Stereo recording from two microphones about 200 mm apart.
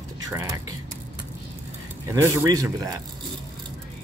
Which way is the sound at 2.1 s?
15° right (ahead or behind).